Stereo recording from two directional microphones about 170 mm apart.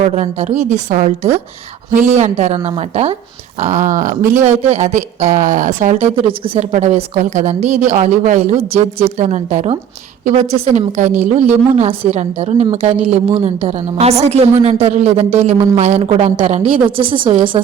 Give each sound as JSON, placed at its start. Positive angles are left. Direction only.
{"t": 0.0, "sound": "a woman's voice", "side_deg": -40}
{"t": 3.6, "sound": "speech", "side_deg": -45}
{"t": 6.1, "sound": "a woman's voice", "side_deg": -30}